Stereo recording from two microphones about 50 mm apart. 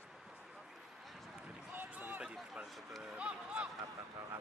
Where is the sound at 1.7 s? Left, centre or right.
Right.